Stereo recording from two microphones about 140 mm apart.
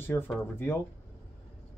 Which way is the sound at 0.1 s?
20° left (ahead or behind).